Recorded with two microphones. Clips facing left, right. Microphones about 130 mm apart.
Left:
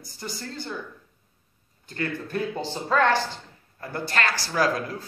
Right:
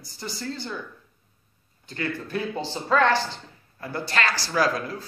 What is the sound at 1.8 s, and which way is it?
Speech, 45° left (ahead or behind).